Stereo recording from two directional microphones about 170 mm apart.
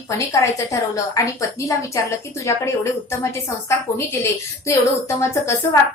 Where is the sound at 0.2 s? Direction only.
20° left (ahead or behind).